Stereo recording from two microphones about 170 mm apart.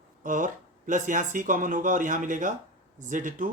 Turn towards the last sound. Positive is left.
turn(degrees=-50)  # may be behind; listen again after turning